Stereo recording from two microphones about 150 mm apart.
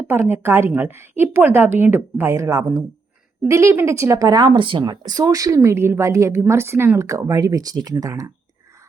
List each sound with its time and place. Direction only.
0.1 s a woman's voice: 15° right (ahead or behind)